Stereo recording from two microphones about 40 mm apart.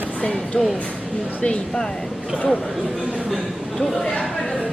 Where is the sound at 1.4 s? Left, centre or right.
Centre.